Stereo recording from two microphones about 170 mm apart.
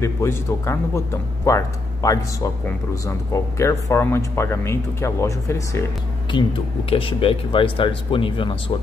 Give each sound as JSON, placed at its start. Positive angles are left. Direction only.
{"t": 0.0, "sound": "speech", "side_deg": 15}
{"t": 6.3, "sound": "speech", "side_deg": 25}